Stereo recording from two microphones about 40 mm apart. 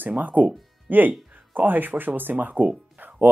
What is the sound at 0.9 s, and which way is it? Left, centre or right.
Speech, right.